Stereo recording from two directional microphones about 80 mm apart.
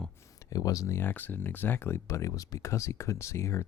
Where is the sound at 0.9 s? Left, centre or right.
Left.